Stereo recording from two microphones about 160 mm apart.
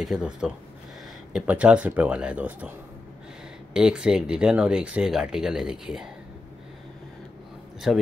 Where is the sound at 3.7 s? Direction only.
5° right (ahead or behind).